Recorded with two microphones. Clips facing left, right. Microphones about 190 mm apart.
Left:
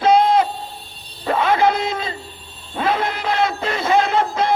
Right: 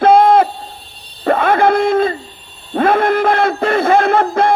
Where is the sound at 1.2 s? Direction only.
55° right (ahead or behind).